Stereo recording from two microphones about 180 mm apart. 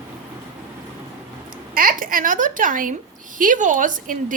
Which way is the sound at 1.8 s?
50° right (ahead or behind).